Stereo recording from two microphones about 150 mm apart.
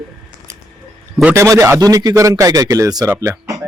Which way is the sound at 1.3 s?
20° right (ahead or behind).